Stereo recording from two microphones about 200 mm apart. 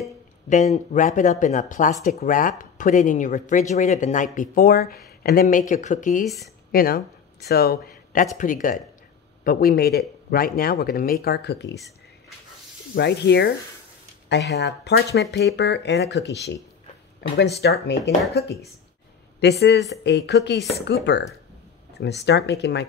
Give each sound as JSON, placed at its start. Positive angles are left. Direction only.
{"t": 0.5, "sound": "speech", "side_deg": 35}
{"t": 6.2, "sound": "speech", "side_deg": 0}
{"t": 6.7, "sound": "speech", "side_deg": 45}
{"t": 12.9, "sound": "speech", "side_deg": 55}
{"t": 14.5, "sound": "speech", "side_deg": 55}
{"t": 17.6, "sound": "speech", "side_deg": 55}
{"t": 19.6, "sound": "speech", "side_deg": 55}